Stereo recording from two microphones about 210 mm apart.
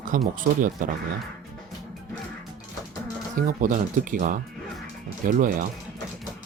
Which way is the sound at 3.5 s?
40° right (ahead or behind).